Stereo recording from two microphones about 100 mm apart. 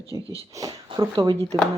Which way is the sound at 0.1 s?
35° right (ahead or behind).